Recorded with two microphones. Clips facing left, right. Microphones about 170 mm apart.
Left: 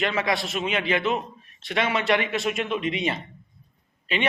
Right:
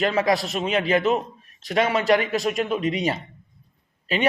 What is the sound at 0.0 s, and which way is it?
A man's voice, 40° right (ahead or behind).